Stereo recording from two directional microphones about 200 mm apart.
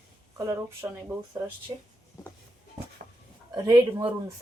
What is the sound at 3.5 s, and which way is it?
Speech, 20° right (ahead or behind).